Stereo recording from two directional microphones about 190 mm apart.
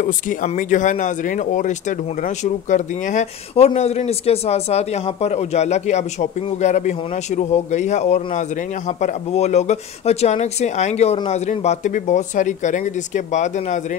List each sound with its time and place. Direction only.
0.0 s speech: 45° left (ahead or behind)